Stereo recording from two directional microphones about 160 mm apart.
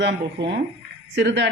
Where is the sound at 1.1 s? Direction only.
90° right.